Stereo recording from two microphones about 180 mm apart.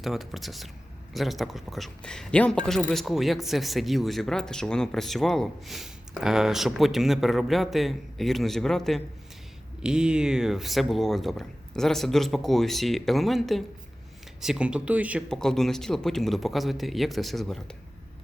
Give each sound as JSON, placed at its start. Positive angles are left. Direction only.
{"t": 0.0, "sound": "speech", "side_deg": 0}
{"t": 15.3, "sound": "speech", "side_deg": 5}